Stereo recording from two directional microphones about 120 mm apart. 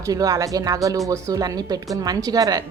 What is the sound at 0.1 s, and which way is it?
A woman's voice, 30° right (ahead or behind).